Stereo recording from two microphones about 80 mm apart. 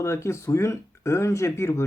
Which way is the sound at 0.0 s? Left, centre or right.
Left.